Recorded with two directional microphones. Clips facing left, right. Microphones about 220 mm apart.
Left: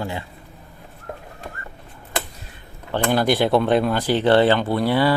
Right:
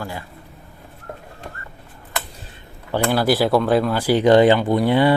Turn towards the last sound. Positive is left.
turn(degrees=-20)  # may be behind; listen again after turning